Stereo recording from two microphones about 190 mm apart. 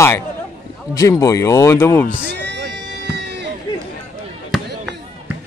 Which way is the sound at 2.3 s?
65° right (ahead or behind).